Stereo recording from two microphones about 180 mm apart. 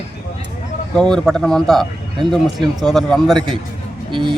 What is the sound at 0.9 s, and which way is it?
Speech, 5° left (ahead or behind).